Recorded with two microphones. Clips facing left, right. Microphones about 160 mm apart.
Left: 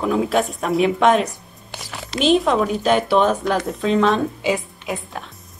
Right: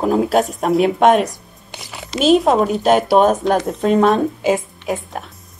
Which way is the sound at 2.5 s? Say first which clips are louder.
Right 4 dB; 40° right (ahead or behind).